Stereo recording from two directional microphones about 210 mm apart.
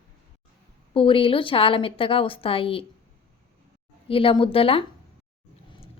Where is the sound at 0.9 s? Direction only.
25° left (ahead or behind).